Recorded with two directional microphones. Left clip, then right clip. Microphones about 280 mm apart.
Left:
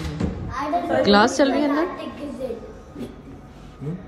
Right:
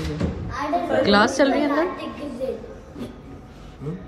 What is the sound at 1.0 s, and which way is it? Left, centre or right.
Speech, left.